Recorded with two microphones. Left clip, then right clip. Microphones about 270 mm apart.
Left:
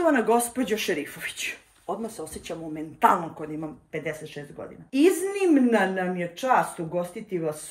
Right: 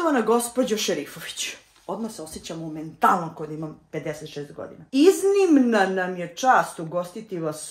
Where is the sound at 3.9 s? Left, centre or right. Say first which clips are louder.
Right 1 dB; centre.